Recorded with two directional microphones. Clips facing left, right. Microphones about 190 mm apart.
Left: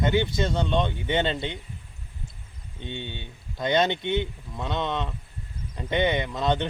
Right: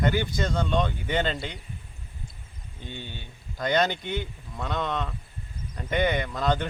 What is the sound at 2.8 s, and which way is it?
Speech, 25° left (ahead or behind).